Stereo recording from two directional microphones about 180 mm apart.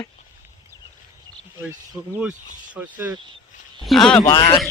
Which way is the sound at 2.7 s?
10° right (ahead or behind).